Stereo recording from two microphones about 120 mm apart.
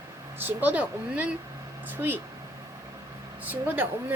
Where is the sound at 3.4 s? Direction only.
15° right (ahead or behind).